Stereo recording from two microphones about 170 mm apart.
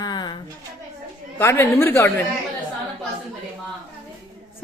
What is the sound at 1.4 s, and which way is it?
Speech, 15° left (ahead or behind).